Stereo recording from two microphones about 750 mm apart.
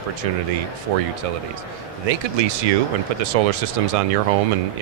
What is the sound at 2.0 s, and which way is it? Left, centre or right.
Speech, right.